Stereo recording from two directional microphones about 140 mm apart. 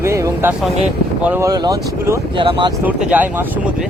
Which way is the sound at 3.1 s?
10° right (ahead or behind).